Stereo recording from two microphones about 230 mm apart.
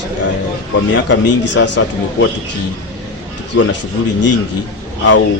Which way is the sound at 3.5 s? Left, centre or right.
Left.